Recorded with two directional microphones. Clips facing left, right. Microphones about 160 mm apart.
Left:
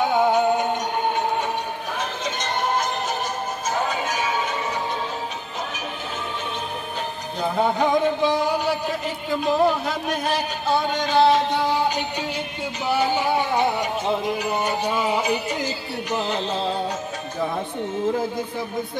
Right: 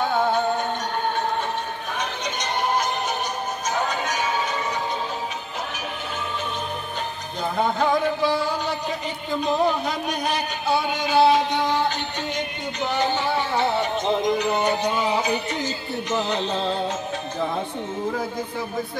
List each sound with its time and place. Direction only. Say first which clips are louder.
0.0 s music: left 3 dB; 15° left (ahead or behind)
2.0 s music: even; centre (ahead or behind)
7.5 s music: left 1 dB; 5° left (ahead or behind)
7.9 s music: left 2 dB; 20° left (ahead or behind)